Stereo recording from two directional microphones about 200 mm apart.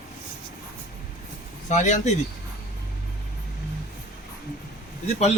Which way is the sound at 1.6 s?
35° left (ahead or behind).